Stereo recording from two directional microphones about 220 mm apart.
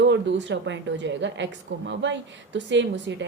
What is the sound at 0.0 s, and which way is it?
A woman's voice, 55° right (ahead or behind).